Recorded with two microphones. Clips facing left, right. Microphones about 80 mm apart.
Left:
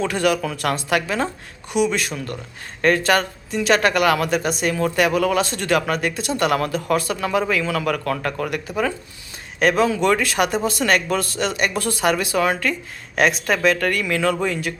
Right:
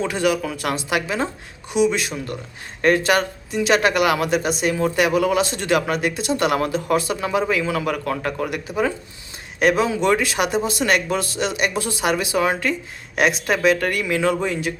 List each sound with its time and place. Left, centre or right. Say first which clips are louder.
0.0 s speech: left 1 dB; centre
11.7 s speech: left 1 dB; left
11.9 s speech: left 1 dB; centre